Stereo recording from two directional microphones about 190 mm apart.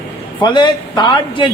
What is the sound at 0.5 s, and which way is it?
Speech, 25° left (ahead or behind).